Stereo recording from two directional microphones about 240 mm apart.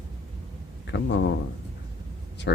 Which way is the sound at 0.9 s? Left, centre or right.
Left.